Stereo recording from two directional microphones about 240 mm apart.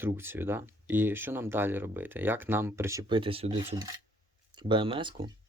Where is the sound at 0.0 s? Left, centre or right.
Centre.